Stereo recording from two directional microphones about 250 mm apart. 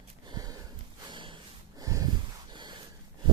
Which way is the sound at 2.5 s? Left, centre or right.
Centre.